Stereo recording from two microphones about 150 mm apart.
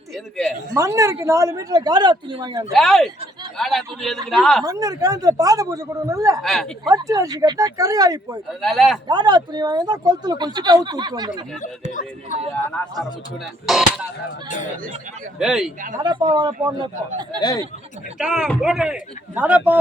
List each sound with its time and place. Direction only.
0.7 s speech: 20° right (ahead or behind)
2.7 s a man's voice: centre (ahead or behind)
4.6 s speech: 25° right (ahead or behind)
6.4 s a man's voice: centre (ahead or behind)
6.8 s speech: 25° right (ahead or behind)
8.6 s a man's voice: centre (ahead or behind)
9.0 s speech: 30° right (ahead or behind)
11.9 s speech: 60° left (ahead or behind)
13.7 s a man's voice: centre (ahead or behind)
15.4 s a man's voice: 5° right (ahead or behind)
16.0 s speech: 30° right (ahead or behind)
17.4 s speech: 25° left (ahead or behind)
18.2 s a man's voice: 5° right (ahead or behind)